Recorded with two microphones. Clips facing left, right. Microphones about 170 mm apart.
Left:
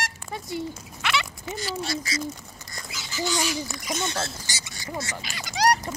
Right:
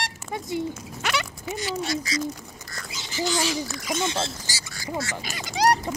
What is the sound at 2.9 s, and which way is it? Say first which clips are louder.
Speech: right 2 dB; 30° right (ahead or behind).